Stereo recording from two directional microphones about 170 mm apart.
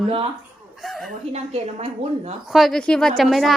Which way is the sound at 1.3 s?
35° right (ahead or behind).